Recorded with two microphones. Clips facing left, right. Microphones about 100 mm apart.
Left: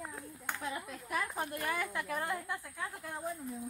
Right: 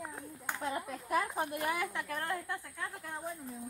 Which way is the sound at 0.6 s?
40° right (ahead or behind).